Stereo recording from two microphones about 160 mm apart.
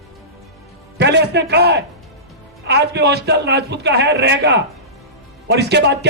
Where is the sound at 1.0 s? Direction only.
90° right.